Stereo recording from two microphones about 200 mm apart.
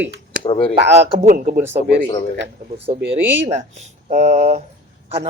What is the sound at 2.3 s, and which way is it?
Speech, 60° right (ahead or behind).